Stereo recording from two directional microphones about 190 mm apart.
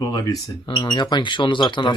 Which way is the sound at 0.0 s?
20° left (ahead or behind).